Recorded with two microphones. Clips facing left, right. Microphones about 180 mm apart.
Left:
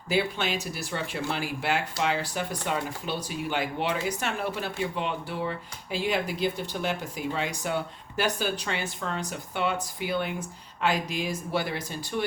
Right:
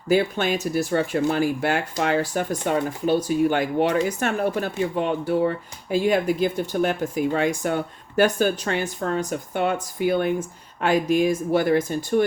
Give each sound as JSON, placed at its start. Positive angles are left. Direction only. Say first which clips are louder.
{"t": 0.1, "sound": "speech", "louder": "right 7 dB", "side_deg": -45}